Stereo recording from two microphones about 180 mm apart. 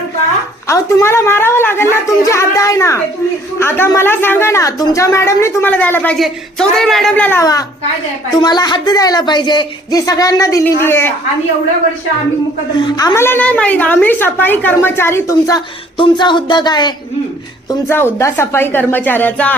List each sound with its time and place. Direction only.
0.7 s a woman's voice: 15° left (ahead or behind)
12.8 s a woman's voice: 20° left (ahead or behind)
17.7 s a woman's voice: 15° left (ahead or behind)